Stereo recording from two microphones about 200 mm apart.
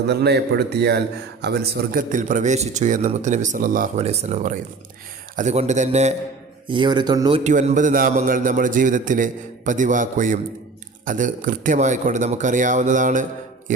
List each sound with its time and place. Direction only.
0.1 s a man's voice: 55° right (ahead or behind); by 6.1 s 35° right (ahead or behind)
6.7 s speech: 25° right (ahead or behind)
7.4 s a man's voice: 35° right (ahead or behind)